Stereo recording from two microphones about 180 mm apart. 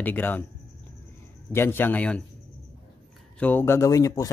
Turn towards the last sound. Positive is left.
turn(degrees=20)  # may be behind; listen again after turning